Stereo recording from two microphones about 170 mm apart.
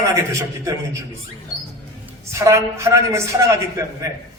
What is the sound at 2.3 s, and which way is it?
A man's voice, 20° right (ahead or behind).